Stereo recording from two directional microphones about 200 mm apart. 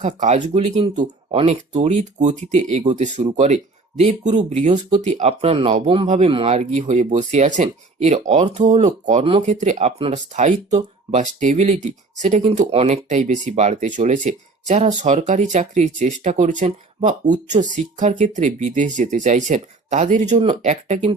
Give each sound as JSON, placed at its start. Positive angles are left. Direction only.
{"t": 0.0, "sound": "speech", "side_deg": -35}